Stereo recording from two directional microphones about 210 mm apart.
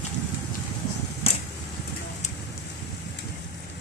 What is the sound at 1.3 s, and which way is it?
Vehicle, 25° left (ahead or behind).